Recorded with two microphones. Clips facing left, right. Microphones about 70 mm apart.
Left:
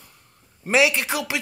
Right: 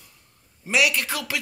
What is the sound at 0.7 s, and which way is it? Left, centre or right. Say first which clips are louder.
Speech: left 3 dB; left.